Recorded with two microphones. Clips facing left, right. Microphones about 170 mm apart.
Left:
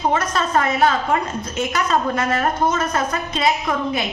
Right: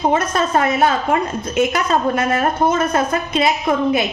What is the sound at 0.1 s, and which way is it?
Speech, 25° right (ahead or behind).